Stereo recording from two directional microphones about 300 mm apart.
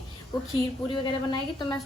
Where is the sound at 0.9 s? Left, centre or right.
Centre.